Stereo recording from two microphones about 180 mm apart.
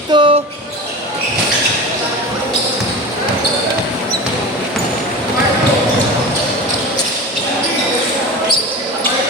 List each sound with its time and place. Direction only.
0.1 s basketball bounce: 30° right (ahead or behind)